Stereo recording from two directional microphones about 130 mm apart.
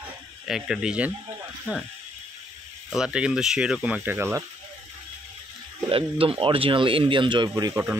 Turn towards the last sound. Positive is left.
turn(degrees=-15)  # may be behind; listen again after turning